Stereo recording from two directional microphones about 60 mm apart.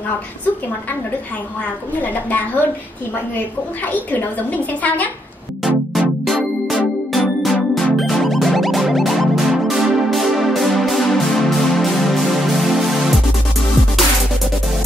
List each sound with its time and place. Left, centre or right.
2.0 s a woman's voice: left
5.9 s music: centre